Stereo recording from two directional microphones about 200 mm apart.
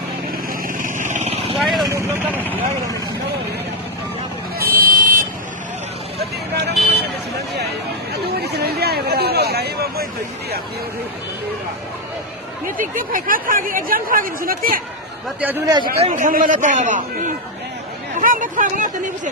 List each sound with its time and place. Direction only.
0.8 s vehicle: 40° right (ahead or behind)
1.5 s vehicle: centre (ahead or behind)
4.6 s buzzer: 45° right (ahead or behind)
6.1 s vehicle: 55° right (ahead or behind)
8.1 s chatter: 55° right (ahead or behind)
12.6 s speech: 45° right (ahead or behind)
15.4 s a man's voice: 10° right (ahead or behind)
16.0 s a man's voice: 35° right (ahead or behind)